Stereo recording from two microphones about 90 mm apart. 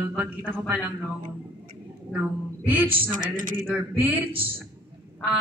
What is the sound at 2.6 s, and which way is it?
A man's voice, 20° right (ahead or behind).